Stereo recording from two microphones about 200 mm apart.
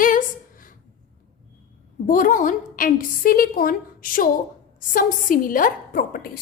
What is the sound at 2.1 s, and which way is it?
A woman's voice, 40° left (ahead or behind).